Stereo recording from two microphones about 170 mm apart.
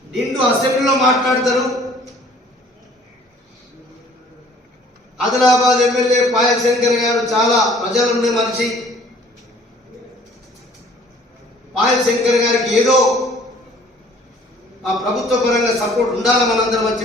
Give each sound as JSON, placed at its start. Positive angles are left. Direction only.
{"t": 0.1, "sound": "a man's voice", "side_deg": 0}
{"t": 5.1, "sound": "a man's voice", "side_deg": 0}
{"t": 11.8, "sound": "a man's voice", "side_deg": 0}
{"t": 14.9, "sound": "a man's voice", "side_deg": 0}